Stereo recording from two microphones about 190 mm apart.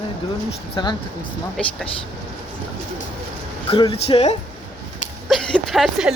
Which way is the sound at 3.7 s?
30° left (ahead or behind).